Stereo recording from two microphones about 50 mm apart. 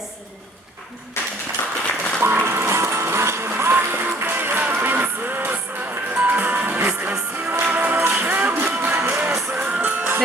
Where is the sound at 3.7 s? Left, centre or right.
Right.